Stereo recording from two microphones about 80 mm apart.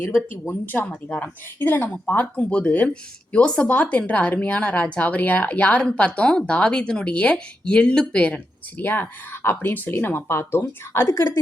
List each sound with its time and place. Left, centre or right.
0.4 s speech: left
8.8 s speech: left